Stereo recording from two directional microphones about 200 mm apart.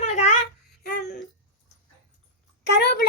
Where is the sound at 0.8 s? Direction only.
45° left (ahead or behind).